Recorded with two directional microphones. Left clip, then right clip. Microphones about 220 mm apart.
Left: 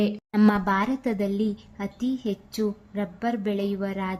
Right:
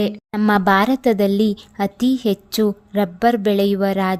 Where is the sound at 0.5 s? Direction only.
45° right (ahead or behind).